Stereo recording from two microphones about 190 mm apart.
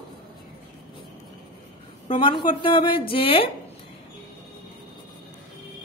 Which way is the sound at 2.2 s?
25° left (ahead or behind).